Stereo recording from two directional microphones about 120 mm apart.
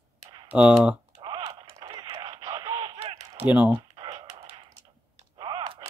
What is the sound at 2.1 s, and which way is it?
Radio, 50° right (ahead or behind).